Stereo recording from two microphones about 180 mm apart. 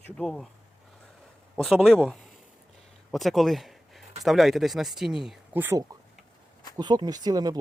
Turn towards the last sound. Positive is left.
turn(degrees=-20)  # may be behind; listen again after turning